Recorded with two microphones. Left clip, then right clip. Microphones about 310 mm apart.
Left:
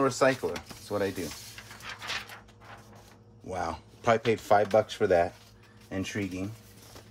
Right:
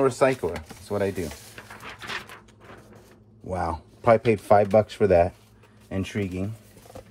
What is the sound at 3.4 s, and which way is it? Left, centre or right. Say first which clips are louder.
Speech: right 5 dB; centre.